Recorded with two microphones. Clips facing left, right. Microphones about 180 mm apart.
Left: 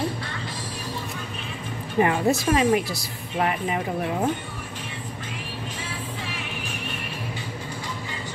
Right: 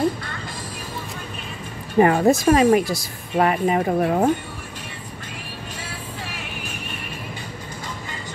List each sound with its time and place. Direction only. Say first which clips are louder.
2.0 s speech: right 5 dB; 45° right (ahead or behind)